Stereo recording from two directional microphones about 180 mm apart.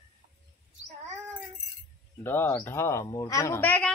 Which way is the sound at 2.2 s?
10° left (ahead or behind).